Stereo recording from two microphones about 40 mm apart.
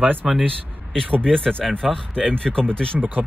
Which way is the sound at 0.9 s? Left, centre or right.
Left.